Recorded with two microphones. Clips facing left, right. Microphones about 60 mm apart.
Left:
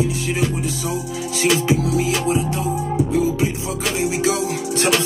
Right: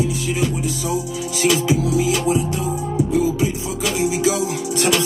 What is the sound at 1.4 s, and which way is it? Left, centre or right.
Music, left.